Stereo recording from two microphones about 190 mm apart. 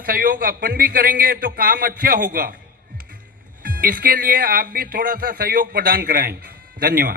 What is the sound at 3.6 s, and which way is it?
A man's voice, 50° right (ahead or behind).